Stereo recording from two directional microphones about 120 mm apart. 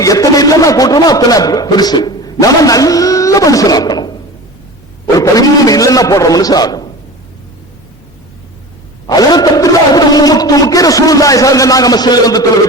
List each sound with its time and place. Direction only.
0.0 s a man's voice: 30° left (ahead or behind)
5.1 s a sound: 30° left (ahead or behind)
9.0 s a man's voice: 35° left (ahead or behind)